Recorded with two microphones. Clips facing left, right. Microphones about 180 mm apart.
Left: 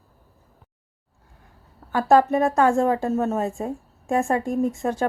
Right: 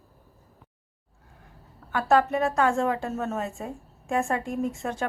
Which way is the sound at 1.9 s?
35° left (ahead or behind).